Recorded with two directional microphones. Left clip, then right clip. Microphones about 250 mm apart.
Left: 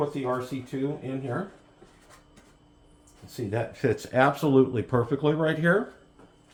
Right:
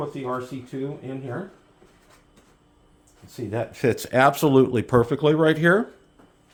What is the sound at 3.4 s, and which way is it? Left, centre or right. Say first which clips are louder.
Speech: right 2 dB; right.